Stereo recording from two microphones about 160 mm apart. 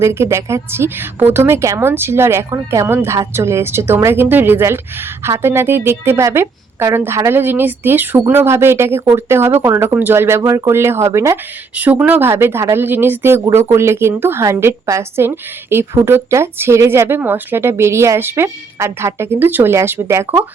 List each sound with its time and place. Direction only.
0.0 s speech: 15° right (ahead or behind)